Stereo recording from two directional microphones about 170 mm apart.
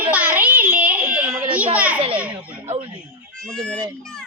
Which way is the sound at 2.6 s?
35° right (ahead or behind).